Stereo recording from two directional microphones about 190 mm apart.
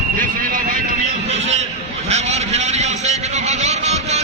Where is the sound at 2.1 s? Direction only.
35° right (ahead or behind).